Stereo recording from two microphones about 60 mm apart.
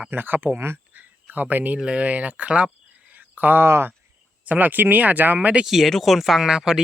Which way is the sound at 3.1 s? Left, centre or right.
Right.